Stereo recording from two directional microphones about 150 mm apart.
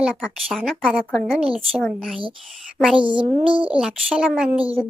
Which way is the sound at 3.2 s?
35° right (ahead or behind).